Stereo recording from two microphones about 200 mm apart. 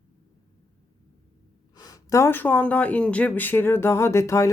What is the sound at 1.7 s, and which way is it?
Speech, 15° left (ahead or behind).